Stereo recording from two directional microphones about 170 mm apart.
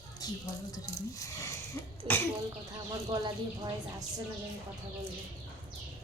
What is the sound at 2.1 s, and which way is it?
A woman's voice, 30° right (ahead or behind).